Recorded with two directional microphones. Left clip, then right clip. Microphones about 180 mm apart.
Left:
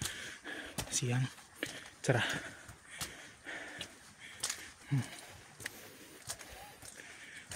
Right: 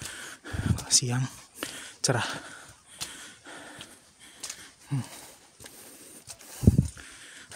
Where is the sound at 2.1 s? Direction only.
35° right (ahead or behind).